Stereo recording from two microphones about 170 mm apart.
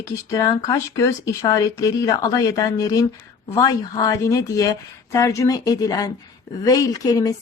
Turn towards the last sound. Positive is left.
turn(degrees=20)  # may be behind; listen again after turning